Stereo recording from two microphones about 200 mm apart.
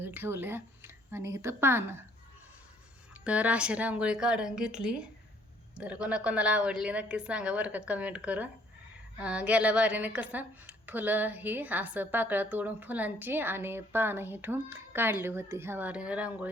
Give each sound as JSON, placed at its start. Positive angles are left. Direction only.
{"t": 0.0, "sound": "speech", "side_deg": -10}
{"t": 3.2, "sound": "a woman's voice", "side_deg": -5}